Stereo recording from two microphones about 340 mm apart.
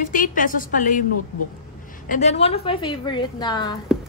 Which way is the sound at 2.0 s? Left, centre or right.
Left.